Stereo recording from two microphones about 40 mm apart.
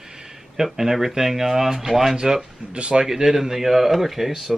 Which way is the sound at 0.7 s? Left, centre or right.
Centre.